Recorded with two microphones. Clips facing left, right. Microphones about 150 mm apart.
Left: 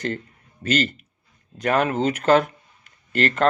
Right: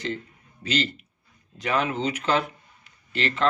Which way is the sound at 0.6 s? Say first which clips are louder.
Left 4 dB; 50° left (ahead or behind).